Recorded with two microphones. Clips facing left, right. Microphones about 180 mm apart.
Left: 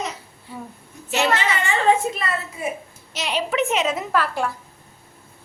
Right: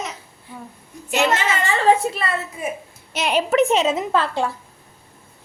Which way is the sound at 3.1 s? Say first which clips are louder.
Right 5 dB; 55° right (ahead or behind).